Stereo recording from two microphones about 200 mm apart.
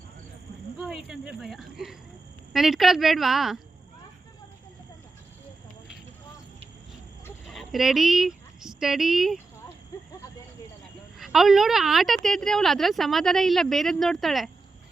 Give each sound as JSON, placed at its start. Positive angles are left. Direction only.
{"t": 0.8, "sound": "a woman's voice", "side_deg": 0}
{"t": 7.5, "sound": "speech", "side_deg": 0}
{"t": 9.9, "sound": "a sound", "side_deg": 15}
{"t": 11.2, "sound": "a woman's voice", "side_deg": 0}